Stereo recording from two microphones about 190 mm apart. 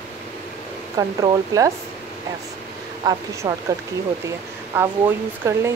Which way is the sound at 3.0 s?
15° right (ahead or behind).